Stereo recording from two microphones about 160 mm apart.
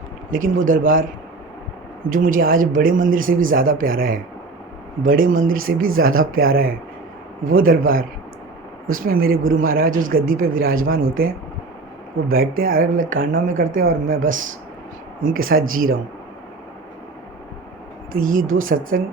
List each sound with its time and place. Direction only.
0.3 s speech: 55° right (ahead or behind)
18.1 s speech: 60° right (ahead or behind)